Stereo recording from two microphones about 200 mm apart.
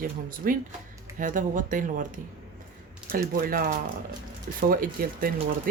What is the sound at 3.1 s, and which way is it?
Speech, 45° right (ahead or behind).